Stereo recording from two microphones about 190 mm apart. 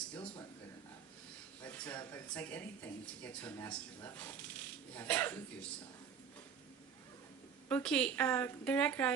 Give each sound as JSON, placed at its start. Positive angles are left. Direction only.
{"t": 1.6, "sound": "speech", "side_deg": 10}
{"t": 7.7, "sound": "speech", "side_deg": 5}